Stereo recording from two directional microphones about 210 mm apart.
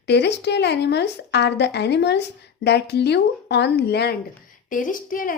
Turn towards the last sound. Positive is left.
turn(degrees=40)  # may be behind; listen again after turning